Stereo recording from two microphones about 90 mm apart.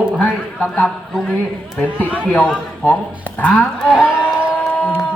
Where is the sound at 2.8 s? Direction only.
20° left (ahead or behind).